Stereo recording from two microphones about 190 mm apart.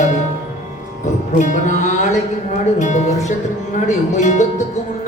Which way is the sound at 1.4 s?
40° left (ahead or behind).